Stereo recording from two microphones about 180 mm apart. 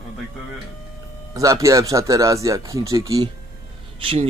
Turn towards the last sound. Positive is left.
turn(degrees=-30)  # may be behind; listen again after turning